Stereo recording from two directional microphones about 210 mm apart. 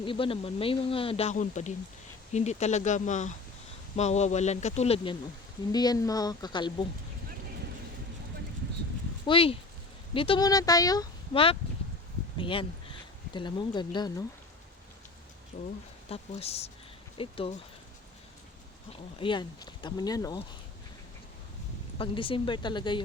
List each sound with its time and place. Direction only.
0.0 s speech: 25° left (ahead or behind)
5.7 s speech: 20° left (ahead or behind)
9.2 s speech: 25° left (ahead or behind)
15.5 s speech: 35° left (ahead or behind)
19.2 s speech: 20° left (ahead or behind)
21.9 s speech: 25° left (ahead or behind)